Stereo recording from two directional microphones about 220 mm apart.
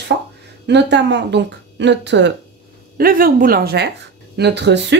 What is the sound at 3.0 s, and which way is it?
A woman's voice, 40° right (ahead or behind).